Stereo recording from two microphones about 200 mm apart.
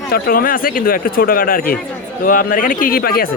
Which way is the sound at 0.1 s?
45° left (ahead or behind).